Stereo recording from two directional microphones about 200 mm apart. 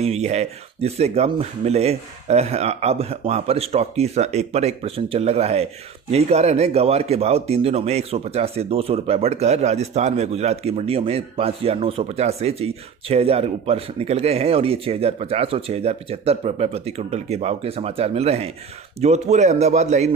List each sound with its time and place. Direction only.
0.0 s speech: 30° right (ahead or behind)